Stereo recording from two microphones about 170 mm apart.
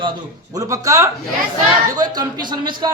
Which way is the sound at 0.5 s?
20° right (ahead or behind).